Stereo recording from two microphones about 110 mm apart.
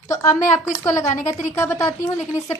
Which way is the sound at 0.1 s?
25° left (ahead or behind).